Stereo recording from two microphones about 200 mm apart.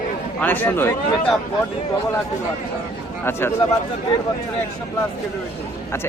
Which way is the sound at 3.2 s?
10° left (ahead or behind).